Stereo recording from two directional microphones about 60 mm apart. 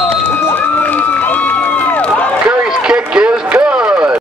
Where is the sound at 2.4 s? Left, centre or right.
Centre.